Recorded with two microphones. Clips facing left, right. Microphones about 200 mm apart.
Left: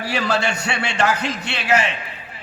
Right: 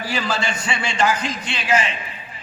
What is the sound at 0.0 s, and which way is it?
A man's voice, 65° left (ahead or behind).